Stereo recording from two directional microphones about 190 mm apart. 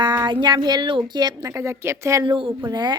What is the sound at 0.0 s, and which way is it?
Speech, 20° right (ahead or behind).